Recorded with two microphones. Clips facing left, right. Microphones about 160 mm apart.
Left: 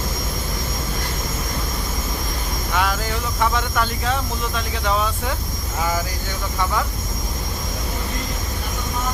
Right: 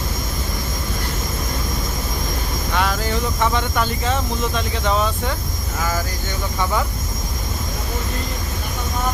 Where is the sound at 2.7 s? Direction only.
5° left (ahead or behind).